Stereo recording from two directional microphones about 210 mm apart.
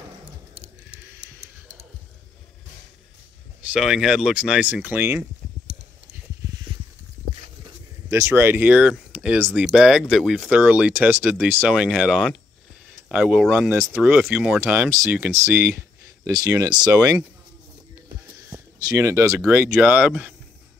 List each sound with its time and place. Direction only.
3.7 s speech: centre (ahead or behind)
8.1 s speech: 10° right (ahead or behind)